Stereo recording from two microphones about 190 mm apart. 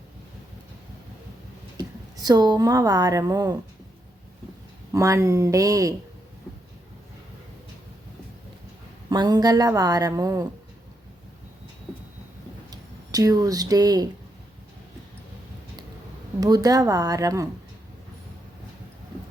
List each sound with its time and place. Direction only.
1.8 s a woman's voice: 20° right (ahead or behind)
4.9 s speech: 15° right (ahead or behind)
9.0 s speech: 20° right (ahead or behind)
12.7 s speech: 20° right (ahead or behind)
16.4 s speech: 20° right (ahead or behind)